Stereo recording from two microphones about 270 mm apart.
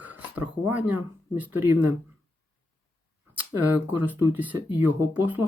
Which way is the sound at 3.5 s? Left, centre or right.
Centre.